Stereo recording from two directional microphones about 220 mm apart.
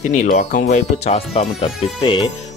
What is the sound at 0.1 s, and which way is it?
Speech, 35° left (ahead or behind).